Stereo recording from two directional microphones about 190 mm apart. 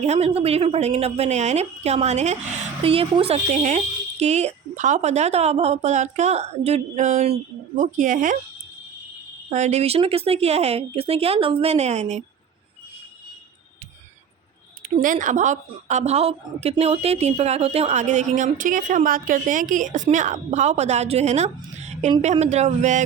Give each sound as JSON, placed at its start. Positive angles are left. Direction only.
{"t": 0.0, "sound": "a woman's voice", "side_deg": -35}
{"t": 9.5, "sound": "a woman's voice", "side_deg": -40}
{"t": 14.9, "sound": "a woman's voice", "side_deg": -45}